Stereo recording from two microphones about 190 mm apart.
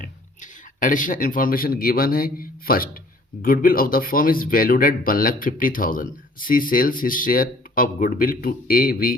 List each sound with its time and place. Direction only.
0.8 s speech: 45° left (ahead or behind)